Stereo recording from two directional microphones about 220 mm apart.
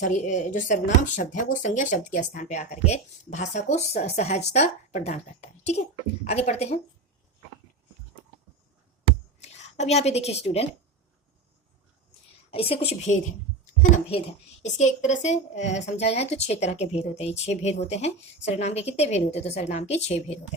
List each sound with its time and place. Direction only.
0.0 s a woman's voice: 35° left (ahead or behind)
9.4 s speech: 30° left (ahead or behind)
12.5 s a woman's voice: 25° left (ahead or behind)
14.6 s a woman's voice: 30° left (ahead or behind)